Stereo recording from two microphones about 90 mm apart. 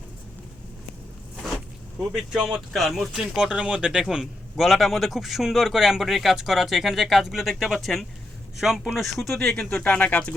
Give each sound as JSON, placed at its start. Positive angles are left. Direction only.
{"t": 1.4, "sound": "a man's voice", "side_deg": 0}